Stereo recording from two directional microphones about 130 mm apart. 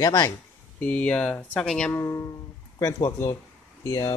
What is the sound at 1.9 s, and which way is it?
Speech, 20° left (ahead or behind).